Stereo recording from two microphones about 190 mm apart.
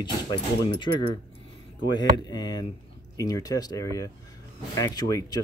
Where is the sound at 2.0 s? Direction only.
20° left (ahead or behind).